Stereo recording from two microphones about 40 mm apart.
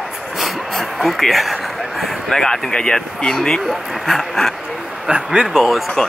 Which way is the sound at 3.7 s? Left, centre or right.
Centre.